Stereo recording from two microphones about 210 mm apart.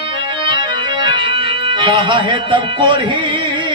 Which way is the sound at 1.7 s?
25° right (ahead or behind).